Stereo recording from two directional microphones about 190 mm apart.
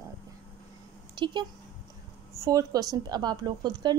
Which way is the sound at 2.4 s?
20° right (ahead or behind).